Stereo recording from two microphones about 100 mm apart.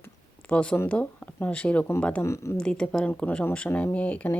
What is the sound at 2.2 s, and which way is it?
Speech, 30° left (ahead or behind).